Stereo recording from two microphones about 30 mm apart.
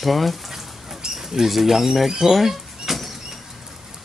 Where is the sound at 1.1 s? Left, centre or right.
Centre.